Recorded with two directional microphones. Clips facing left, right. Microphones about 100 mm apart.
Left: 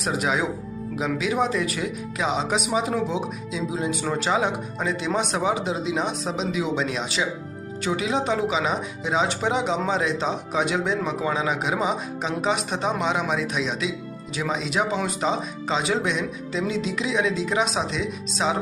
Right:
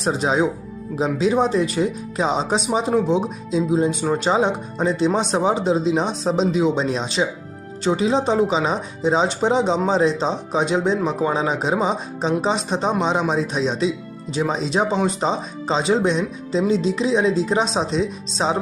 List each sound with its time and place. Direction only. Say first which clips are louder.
0.0 s speech: right 5 dB; 30° right (ahead or behind)